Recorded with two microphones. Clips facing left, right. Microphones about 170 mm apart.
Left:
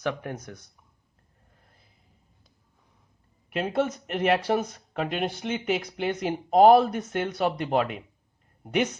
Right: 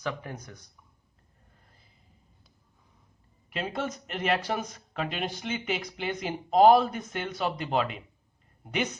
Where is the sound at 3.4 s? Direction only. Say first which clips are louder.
Left 6 dB; 60° left (ahead or behind).